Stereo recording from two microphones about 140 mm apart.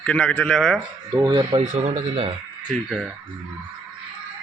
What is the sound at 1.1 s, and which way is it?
Speech, 30° right (ahead or behind).